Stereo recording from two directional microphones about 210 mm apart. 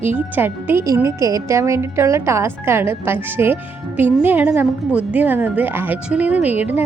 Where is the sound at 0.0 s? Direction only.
10° right (ahead or behind).